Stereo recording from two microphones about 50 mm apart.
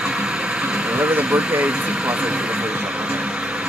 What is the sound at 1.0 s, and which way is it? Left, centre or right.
Vehicle, right.